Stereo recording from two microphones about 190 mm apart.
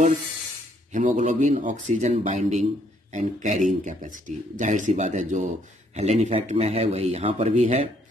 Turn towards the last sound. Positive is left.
turn(degrees=-40)  # may be behind; listen again after turning